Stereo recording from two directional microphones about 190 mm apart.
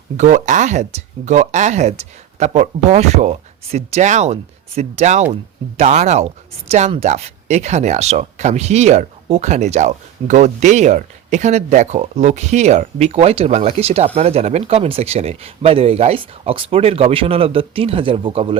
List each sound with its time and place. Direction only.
0.2 s speech: 40° right (ahead or behind)